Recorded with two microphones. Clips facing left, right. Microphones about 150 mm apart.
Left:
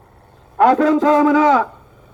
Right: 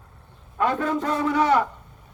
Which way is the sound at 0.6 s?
90° left.